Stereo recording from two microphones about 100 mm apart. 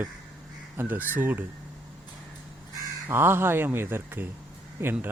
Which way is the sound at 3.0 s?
25° right (ahead or behind).